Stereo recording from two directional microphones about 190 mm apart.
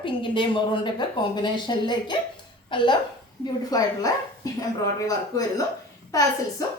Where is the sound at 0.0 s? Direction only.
25° left (ahead or behind).